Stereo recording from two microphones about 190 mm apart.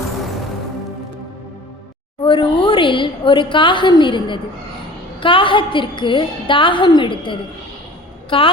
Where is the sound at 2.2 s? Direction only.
25° left (ahead or behind).